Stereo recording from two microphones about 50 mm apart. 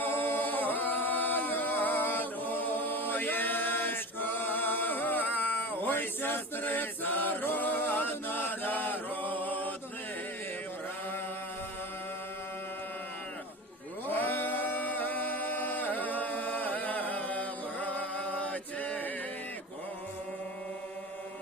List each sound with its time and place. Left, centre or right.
0.0 s singing: left
14.1 s a capella: left